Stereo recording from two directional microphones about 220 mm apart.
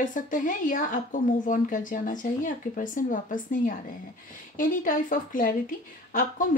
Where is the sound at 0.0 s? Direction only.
35° left (ahead or behind).